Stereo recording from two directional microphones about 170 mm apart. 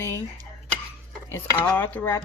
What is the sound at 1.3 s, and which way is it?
Speech, 10° left (ahead or behind).